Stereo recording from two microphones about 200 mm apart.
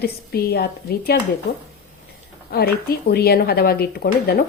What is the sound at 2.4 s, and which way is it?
A woman's voice, 50° left (ahead or behind).